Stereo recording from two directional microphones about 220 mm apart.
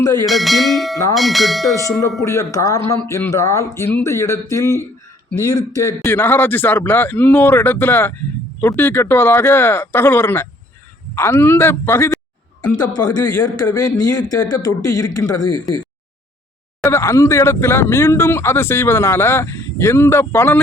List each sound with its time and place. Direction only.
0.3 s bell: centre (ahead or behind)
1.6 s speech: 15° left (ahead or behind)
16.8 s speech: 10° left (ahead or behind)